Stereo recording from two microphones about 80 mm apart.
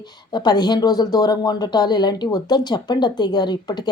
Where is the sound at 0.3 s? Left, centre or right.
Left.